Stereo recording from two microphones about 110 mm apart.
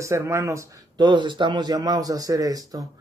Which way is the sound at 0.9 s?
45° right (ahead or behind).